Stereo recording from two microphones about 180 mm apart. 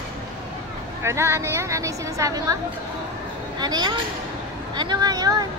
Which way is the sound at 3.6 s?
25° right (ahead or behind).